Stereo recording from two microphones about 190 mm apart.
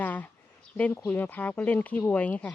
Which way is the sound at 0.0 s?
10° left (ahead or behind).